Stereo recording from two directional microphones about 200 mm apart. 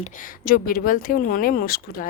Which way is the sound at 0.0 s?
45° left (ahead or behind).